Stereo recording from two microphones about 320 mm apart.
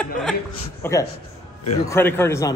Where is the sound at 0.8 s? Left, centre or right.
Centre.